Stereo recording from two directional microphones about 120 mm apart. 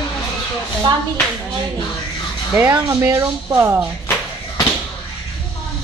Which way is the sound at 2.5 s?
20° right (ahead or behind).